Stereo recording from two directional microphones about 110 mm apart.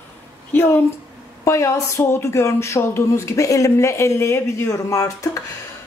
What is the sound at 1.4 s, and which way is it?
Speech, 25° left (ahead or behind).